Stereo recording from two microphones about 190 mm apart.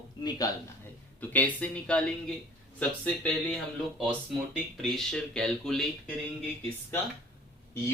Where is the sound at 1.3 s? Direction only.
10° left (ahead or behind).